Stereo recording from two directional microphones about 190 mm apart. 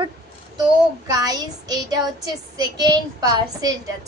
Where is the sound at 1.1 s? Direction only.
20° right (ahead or behind).